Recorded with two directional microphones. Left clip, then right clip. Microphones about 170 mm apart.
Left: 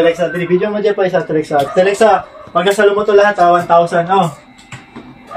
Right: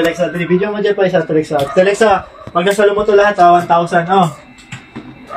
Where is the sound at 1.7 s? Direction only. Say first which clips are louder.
Even; 50° left (ahead or behind).